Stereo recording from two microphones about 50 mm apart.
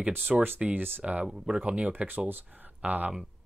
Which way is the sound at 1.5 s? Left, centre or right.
Right.